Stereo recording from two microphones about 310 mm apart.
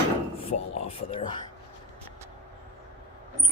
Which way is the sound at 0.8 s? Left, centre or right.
Centre.